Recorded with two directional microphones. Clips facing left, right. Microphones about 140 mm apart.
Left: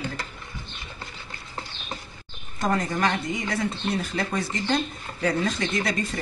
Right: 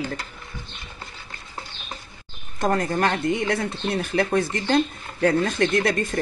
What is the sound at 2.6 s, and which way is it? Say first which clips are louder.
Speech: right 3 dB; 50° right (ahead or behind).